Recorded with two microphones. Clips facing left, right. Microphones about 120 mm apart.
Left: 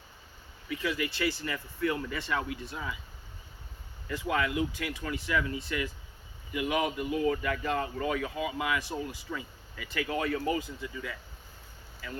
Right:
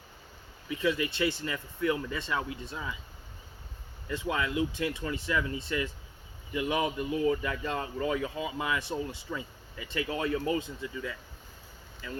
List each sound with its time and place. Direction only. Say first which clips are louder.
0.7 s speech: right 3 dB; 25° right (ahead or behind)
4.1 s speech: left 1 dB; 25° right (ahead or behind)